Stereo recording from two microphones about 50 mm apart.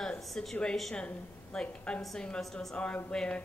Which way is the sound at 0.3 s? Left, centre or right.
Centre.